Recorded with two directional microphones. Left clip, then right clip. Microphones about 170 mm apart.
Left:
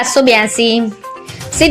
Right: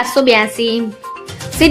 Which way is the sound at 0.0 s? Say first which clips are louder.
Left 1 dB; 15° left (ahead or behind).